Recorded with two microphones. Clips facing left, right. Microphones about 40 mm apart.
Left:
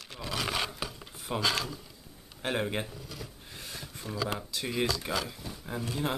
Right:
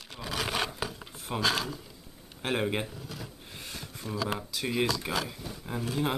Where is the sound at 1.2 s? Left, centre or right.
Centre.